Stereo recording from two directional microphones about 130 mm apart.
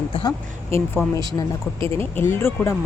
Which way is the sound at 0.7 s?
15° left (ahead or behind).